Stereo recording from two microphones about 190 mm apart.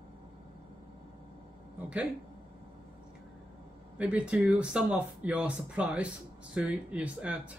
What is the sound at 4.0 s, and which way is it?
Speech, 5° right (ahead or behind).